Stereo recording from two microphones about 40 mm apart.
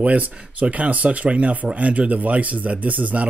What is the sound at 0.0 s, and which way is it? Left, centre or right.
Speech, right.